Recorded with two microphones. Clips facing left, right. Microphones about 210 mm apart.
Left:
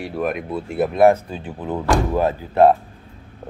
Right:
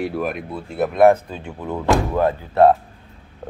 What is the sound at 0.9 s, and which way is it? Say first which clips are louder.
Speech: right 1 dB; 25° left (ahead or behind).